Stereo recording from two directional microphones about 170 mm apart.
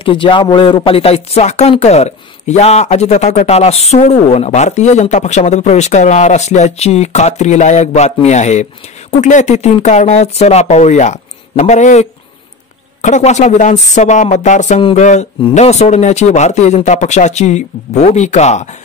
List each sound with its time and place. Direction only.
0.0 s speech: 30° left (ahead or behind)
14.8 s speech: 30° left (ahead or behind)